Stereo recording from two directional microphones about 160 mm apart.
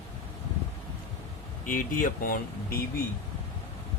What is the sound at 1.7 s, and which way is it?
Speech, 55° left (ahead or behind).